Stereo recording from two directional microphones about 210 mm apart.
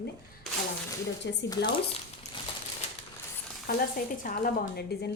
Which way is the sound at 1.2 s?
55° left (ahead or behind).